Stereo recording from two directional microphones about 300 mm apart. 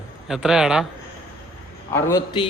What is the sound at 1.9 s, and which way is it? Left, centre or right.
Speech, centre.